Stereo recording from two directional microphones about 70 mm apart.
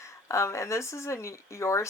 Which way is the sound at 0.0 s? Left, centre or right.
Left.